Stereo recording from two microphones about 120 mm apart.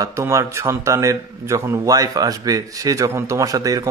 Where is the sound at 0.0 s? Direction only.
25° right (ahead or behind).